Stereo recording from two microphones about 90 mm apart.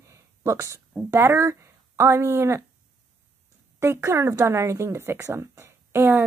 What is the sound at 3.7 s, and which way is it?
Speech, 30° right (ahead or behind).